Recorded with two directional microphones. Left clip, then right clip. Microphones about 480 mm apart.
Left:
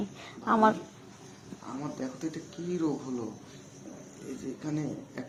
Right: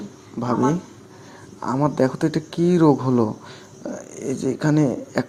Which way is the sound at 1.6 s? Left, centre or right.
Right.